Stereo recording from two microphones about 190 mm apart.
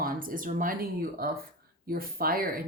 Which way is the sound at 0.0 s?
50° right (ahead or behind).